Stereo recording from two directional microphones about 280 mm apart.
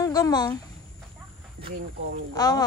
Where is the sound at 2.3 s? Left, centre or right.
Centre.